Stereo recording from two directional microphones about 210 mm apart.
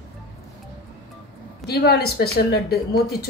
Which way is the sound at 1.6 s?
50° left (ahead or behind).